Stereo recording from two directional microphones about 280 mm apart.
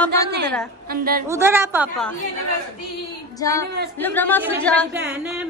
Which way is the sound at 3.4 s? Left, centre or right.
Centre.